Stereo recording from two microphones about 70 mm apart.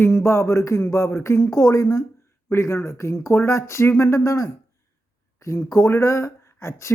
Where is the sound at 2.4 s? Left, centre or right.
Left.